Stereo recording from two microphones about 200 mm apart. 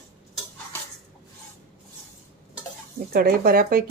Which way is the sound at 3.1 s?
50° right (ahead or behind).